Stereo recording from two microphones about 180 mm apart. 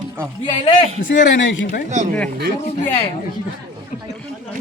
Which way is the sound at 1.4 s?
90° left.